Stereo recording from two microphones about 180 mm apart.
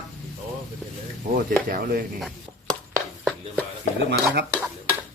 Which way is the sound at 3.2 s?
Centre (ahead or behind).